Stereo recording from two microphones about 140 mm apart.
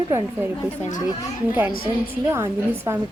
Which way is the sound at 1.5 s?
15° right (ahead or behind).